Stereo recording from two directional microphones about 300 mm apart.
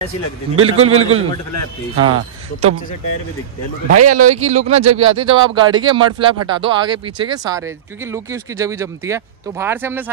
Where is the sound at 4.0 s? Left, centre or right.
Right.